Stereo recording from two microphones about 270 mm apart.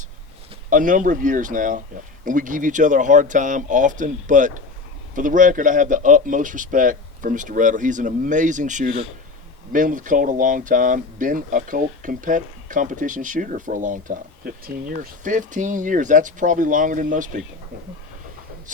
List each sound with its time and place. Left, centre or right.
0.7 s speech: right